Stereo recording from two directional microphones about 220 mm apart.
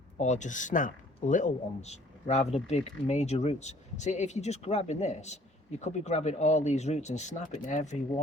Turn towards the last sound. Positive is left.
turn(degrees=35)  # may be behind; listen again after turning